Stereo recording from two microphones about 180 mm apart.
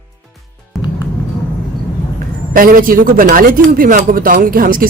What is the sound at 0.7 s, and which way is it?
Music, centre (ahead or behind).